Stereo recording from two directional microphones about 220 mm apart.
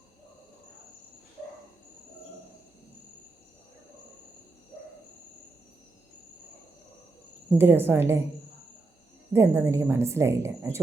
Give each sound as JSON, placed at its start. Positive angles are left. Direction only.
{"t": 7.6, "sound": "a woman's voice", "side_deg": -10}
{"t": 9.3, "sound": "a woman's voice", "side_deg": -10}